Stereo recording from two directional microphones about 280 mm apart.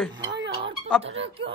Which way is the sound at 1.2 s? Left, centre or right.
Centre.